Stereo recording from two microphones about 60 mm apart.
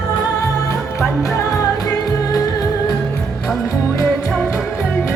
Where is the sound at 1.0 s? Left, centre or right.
Left.